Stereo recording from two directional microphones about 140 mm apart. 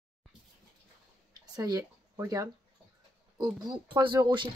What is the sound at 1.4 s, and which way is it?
Speech, 30° right (ahead or behind).